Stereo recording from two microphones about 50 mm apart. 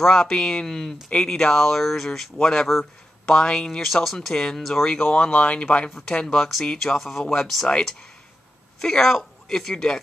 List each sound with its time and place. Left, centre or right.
0.0 s speech: centre
3.8 s speech: centre
5.0 s speech: left
5.9 s speech: centre
8.8 s speech: centre